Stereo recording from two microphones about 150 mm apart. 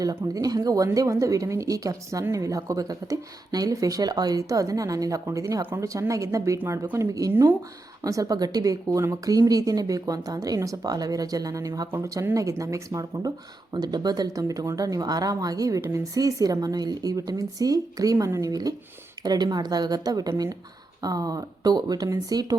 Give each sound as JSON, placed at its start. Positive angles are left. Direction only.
{"t": 0.0, "sound": "speech", "side_deg": -25}